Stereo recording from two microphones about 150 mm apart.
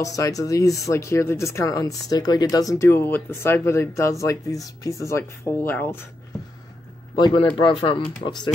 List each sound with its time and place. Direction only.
0.0 s speech: 25° left (ahead or behind)
7.2 s speech: 30° left (ahead or behind)